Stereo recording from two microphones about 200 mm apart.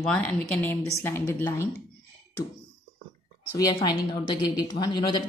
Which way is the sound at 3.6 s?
20° left (ahead or behind).